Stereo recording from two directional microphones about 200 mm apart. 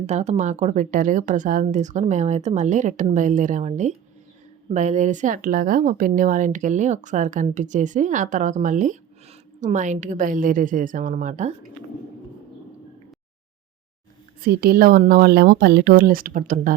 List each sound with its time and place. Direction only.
0.0 s speech: 35° right (ahead or behind)
14.4 s speech: 50° right (ahead or behind)